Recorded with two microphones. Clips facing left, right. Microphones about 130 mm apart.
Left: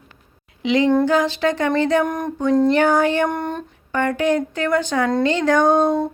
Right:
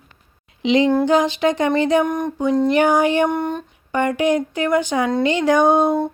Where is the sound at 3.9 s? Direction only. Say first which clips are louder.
Right 1 dB; 15° right (ahead or behind).